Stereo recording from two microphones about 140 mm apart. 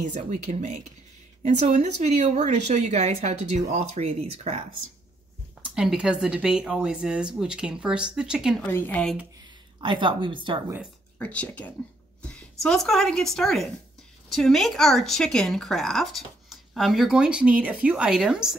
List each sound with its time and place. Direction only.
0.0 s speech: 55° right (ahead or behind)
5.8 s speech: 5° right (ahead or behind)
8.7 s speech: 15° left (ahead or behind)
9.8 s a woman's voice: 35° right (ahead or behind)
11.1 s a woman's voice: 10° left (ahead or behind); by 18.6 s 5° right (ahead or behind)